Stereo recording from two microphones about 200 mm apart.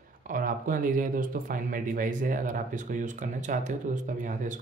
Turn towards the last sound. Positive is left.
turn(degrees=-40)  # may be behind; listen again after turning